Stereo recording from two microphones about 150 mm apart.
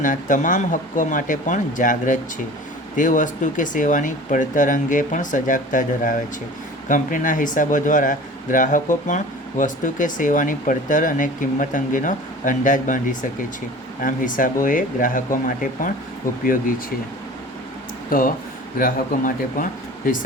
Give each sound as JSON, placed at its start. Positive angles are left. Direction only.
{"t": 0.0, "sound": "speech", "side_deg": 60}
{"t": 18.1, "sound": "speech", "side_deg": 70}